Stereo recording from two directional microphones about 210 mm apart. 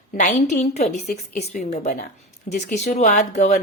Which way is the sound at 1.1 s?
45° left (ahead or behind).